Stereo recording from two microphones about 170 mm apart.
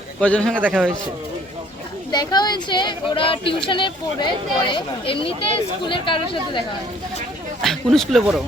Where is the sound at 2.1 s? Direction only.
25° left (ahead or behind).